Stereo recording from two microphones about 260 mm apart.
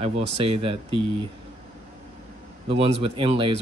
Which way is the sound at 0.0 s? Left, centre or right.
Right.